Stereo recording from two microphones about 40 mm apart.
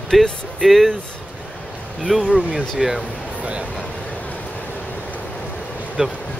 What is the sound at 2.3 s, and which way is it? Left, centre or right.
Speech, right.